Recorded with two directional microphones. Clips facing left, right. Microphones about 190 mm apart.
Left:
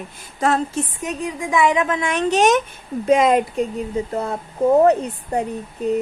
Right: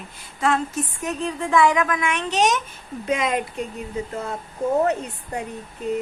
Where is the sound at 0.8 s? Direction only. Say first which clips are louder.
Left 2 dB; 20° left (ahead or behind).